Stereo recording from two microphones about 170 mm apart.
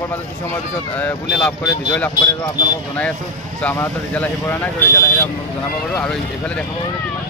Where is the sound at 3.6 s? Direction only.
10° left (ahead or behind).